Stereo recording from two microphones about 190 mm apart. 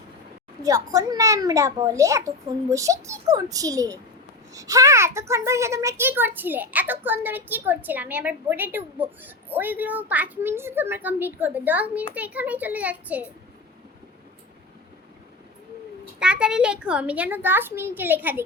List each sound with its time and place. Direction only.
0.6 s a child's voice: 20° right (ahead or behind)
16.2 s a child's voice: 5° right (ahead or behind)